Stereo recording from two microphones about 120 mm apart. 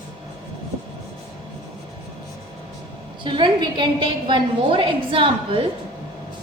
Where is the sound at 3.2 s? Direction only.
40° right (ahead or behind).